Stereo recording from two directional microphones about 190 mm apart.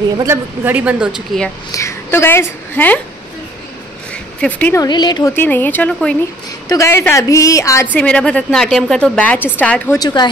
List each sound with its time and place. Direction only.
0.2 s speech: 10° right (ahead or behind)
1.7 s a woman's voice: 15° left (ahead or behind)
4.1 s a sound: 5° left (ahead or behind)
4.8 s speech: 20° left (ahead or behind)
5.3 s a woman's voice: 10° left (ahead or behind)
9.9 s speech: 20° left (ahead or behind)